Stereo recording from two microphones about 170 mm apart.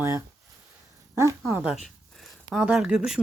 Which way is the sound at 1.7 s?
Centre (ahead or behind).